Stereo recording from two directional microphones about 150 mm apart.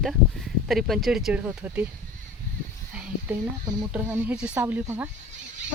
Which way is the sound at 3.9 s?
10° right (ahead or behind).